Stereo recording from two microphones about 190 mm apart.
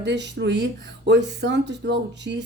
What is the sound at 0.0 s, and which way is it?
A woman's voice, 65° right (ahead or behind).